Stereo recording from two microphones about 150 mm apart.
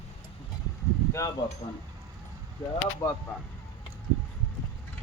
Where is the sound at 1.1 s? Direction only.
20° left (ahead or behind).